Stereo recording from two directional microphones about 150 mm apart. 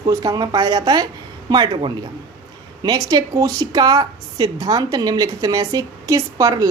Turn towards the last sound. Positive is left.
turn(degrees=-20)  # may be behind; listen again after turning